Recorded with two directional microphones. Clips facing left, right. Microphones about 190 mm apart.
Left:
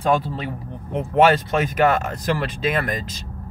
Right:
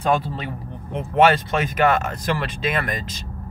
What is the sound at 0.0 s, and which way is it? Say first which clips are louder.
Speech: left 1 dB; 40° left (ahead or behind).